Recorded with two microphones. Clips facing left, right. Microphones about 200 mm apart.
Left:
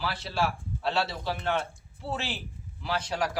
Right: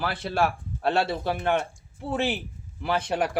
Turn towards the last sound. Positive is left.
turn(degrees=-55)  # may be behind; listen again after turning